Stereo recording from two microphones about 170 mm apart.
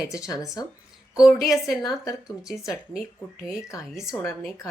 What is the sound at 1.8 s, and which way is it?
Speech, 20° left (ahead or behind).